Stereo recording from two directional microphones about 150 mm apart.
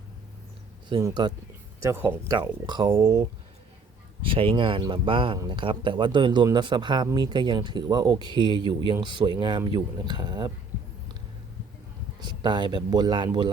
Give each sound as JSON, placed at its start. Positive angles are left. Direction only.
{"t": 0.9, "sound": "speech", "side_deg": -30}
{"t": 1.8, "sound": "speech", "side_deg": -15}
{"t": 2.4, "sound": "speech", "side_deg": -30}
{"t": 4.2, "sound": "speech", "side_deg": -35}
{"t": 12.2, "sound": "speech", "side_deg": -30}